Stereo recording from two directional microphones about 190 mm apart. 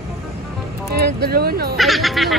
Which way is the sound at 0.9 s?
55° right (ahead or behind).